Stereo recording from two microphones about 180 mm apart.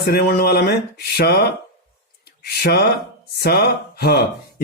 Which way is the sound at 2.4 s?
60° left (ahead or behind).